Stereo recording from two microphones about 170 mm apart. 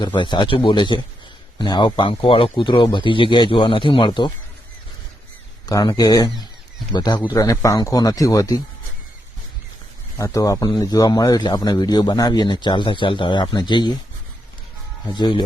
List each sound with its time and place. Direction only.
0.0 s speech: 25° left (ahead or behind)
5.6 s speech: 25° left (ahead or behind)
10.2 s speech: 20° left (ahead or behind)
15.1 s speech: 25° left (ahead or behind)